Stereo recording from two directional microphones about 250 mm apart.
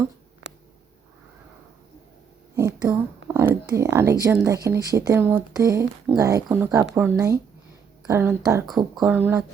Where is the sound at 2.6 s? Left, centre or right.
Centre.